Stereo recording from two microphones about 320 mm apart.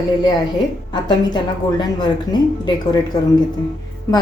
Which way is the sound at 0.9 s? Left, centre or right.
Centre.